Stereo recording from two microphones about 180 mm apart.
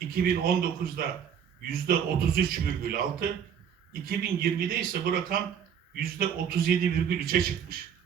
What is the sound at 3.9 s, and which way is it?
A man's voice, 55° right (ahead or behind).